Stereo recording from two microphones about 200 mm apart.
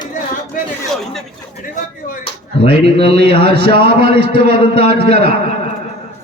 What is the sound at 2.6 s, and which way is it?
Speech, 55° right (ahead or behind).